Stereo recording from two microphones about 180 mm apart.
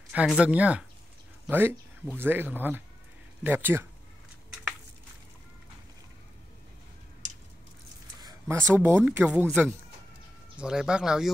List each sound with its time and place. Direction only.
0.1 s speech: 5° right (ahead or behind)
8.2 s a sound: 20° right (ahead or behind)
8.7 s speech: 10° right (ahead or behind)
10.6 s speech: 5° right (ahead or behind)